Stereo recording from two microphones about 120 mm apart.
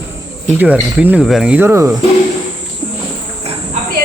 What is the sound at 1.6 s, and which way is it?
Speech, 25° right (ahead or behind).